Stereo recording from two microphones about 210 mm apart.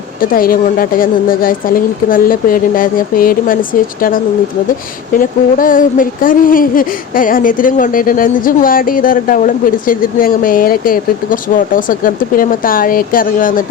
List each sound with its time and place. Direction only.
0.2 s speech: 45° left (ahead or behind)
5.1 s speech: 40° left (ahead or behind)